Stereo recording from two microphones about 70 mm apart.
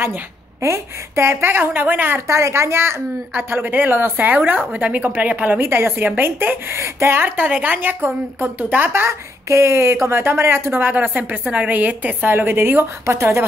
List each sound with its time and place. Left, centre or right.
0.6 s a woman's voice: right
2.2 s a woman's voice: right
3.3 s speech: right
5.6 s a woman's voice: right